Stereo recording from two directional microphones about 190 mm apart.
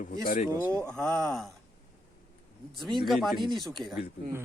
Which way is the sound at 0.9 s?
5° left (ahead or behind).